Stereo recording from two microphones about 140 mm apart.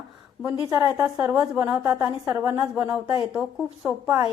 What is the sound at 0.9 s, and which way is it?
A woman's voice, 15° right (ahead or behind).